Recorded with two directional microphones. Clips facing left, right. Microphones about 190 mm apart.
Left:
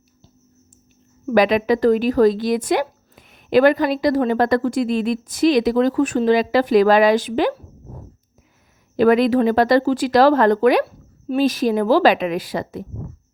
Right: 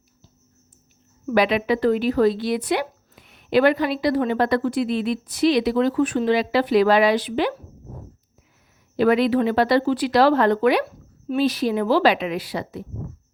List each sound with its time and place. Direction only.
1.3 s speech: 45° left (ahead or behind)
9.0 s speech: 45° left (ahead or behind)